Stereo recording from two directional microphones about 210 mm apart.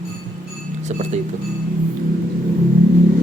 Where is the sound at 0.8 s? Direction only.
35° right (ahead or behind).